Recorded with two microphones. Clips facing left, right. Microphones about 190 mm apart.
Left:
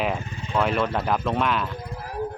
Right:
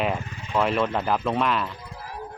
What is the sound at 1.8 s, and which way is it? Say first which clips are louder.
Wild animals: left 5 dB; 50° left (ahead or behind).